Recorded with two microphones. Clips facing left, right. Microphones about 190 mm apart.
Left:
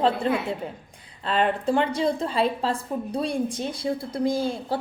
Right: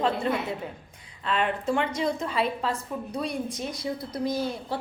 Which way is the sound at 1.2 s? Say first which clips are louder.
Left 4 dB; 35° left (ahead or behind).